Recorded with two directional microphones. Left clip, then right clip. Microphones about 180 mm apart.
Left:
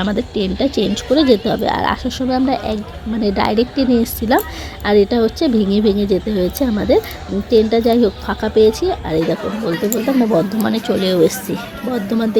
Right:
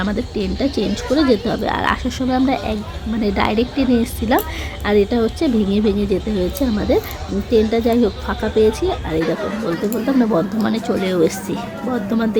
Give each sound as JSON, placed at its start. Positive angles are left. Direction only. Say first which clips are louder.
{"t": 0.0, "sound": "speech", "louder": "left 3 dB", "side_deg": 20}